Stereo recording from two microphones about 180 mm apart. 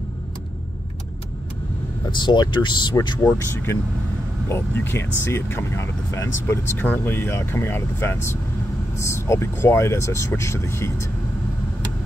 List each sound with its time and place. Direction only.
2.0 s speech: 25° left (ahead or behind)
3.3 s speech: 15° left (ahead or behind)